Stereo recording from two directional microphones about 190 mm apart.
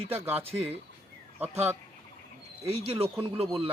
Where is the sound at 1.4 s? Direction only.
35° right (ahead or behind).